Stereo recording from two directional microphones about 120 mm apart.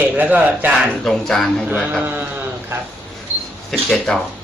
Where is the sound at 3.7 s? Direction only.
5° left (ahead or behind).